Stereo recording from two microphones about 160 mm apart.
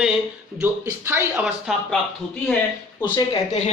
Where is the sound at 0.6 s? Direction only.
15° right (ahead or behind).